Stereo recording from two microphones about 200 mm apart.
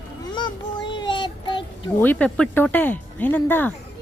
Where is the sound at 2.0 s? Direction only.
10° left (ahead or behind).